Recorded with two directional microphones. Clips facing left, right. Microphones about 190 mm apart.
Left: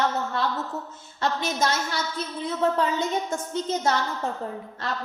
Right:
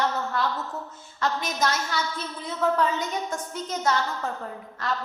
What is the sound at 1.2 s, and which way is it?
A woman's voice, 25° left (ahead or behind).